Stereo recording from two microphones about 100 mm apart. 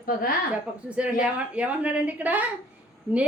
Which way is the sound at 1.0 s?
10° right (ahead or behind).